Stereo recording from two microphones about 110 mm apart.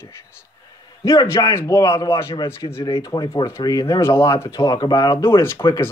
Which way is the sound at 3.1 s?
40° left (ahead or behind).